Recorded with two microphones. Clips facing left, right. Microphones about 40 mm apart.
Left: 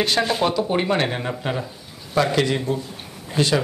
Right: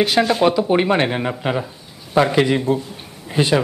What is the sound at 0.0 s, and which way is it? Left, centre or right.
A man's voice, centre.